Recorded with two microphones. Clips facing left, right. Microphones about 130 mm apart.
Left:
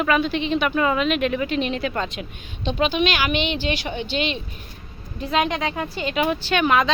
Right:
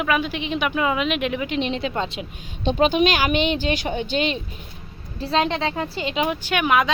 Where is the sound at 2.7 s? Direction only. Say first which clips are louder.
Right 3 dB; 45° right (ahead or behind); by 6.2 s 25° right (ahead or behind).